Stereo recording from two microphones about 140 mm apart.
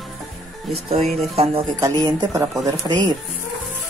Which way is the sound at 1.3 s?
45° right (ahead or behind).